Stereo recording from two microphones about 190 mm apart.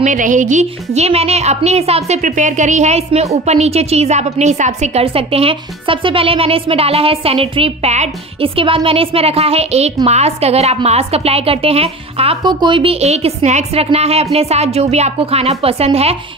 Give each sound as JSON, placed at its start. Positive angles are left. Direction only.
{"t": 0.0, "sound": "a woman's voice", "side_deg": -40}